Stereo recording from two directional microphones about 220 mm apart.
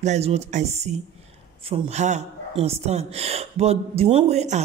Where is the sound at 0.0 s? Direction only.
30° right (ahead or behind).